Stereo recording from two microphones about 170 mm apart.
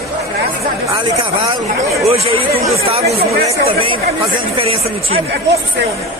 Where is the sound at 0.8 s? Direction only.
25° right (ahead or behind).